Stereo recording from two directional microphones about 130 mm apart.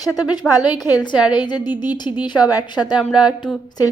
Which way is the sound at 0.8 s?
35° left (ahead or behind).